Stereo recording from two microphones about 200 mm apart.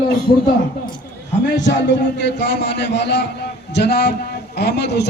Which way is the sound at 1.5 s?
60° left (ahead or behind).